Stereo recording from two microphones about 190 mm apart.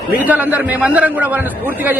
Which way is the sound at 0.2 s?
10° right (ahead or behind).